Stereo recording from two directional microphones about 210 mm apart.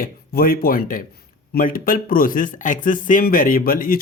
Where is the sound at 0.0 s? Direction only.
45° left (ahead or behind).